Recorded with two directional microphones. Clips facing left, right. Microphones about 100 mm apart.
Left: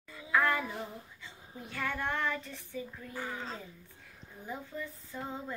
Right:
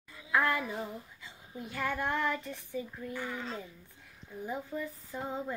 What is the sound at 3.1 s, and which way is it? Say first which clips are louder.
Speech: right 2 dB; 35° left (ahead or behind).